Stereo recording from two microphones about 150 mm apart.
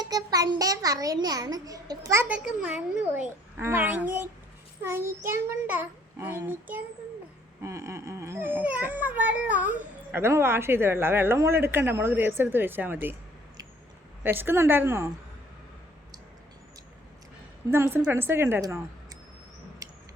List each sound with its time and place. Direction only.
0.0 s a child's voice: 25° right (ahead or behind)
2.2 s speech: 10° right (ahead or behind)
14.3 s speech: 15° right (ahead or behind)
17.7 s speech: 15° right (ahead or behind)